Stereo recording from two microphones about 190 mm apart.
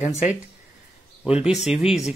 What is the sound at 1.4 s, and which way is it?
Speech, 5° right (ahead or behind).